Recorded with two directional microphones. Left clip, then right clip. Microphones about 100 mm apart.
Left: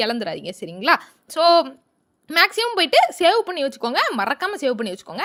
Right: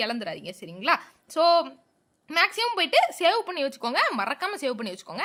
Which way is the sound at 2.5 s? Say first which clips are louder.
Left 5 dB; 40° left (ahead or behind).